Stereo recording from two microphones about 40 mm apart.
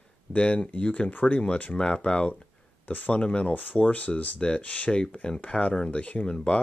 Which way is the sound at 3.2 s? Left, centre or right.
Left.